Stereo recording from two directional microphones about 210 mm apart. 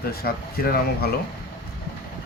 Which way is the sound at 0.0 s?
45° left (ahead or behind).